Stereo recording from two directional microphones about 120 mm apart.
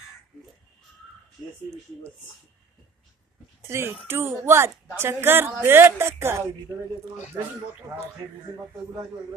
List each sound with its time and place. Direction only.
3.6 s a woman's voice: 20° right (ahead or behind)